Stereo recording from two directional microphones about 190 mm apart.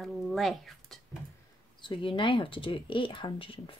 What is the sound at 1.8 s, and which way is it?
Speech, 25° left (ahead or behind).